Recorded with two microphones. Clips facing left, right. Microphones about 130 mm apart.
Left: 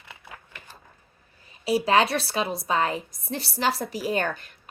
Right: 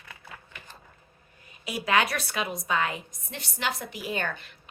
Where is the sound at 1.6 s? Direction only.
30° left (ahead or behind).